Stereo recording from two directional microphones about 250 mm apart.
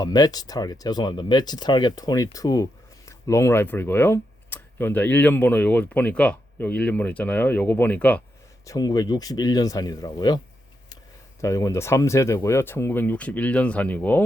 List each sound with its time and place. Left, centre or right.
0.0 s speech: centre